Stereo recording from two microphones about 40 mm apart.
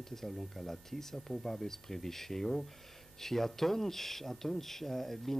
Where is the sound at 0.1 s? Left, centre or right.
Centre.